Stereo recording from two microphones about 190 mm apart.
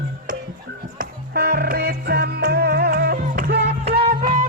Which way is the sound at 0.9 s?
55° right (ahead or behind).